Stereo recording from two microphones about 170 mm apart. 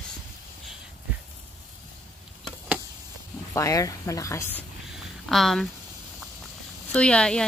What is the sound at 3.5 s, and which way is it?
Speech, 20° left (ahead or behind).